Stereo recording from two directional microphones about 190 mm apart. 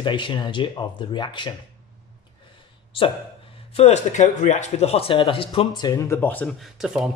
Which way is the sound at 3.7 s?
35° left (ahead or behind).